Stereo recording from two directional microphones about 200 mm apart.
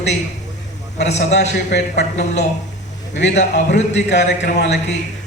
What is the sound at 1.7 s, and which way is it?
Speech, 60° left (ahead or behind).